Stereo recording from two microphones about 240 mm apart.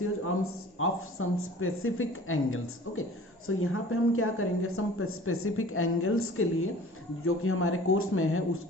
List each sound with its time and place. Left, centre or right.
0.4 s a woman's voice: left